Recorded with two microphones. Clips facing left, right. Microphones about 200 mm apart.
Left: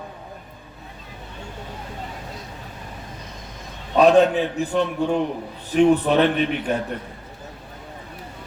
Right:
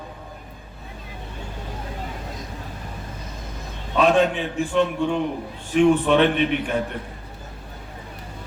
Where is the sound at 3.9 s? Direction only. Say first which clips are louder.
Left 4 dB; 40° left (ahead or behind).